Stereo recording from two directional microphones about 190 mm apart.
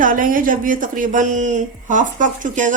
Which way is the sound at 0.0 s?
45° right (ahead or behind).